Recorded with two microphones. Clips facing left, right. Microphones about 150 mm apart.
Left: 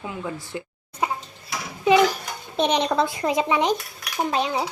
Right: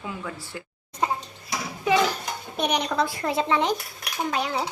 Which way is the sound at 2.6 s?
25° left (ahead or behind).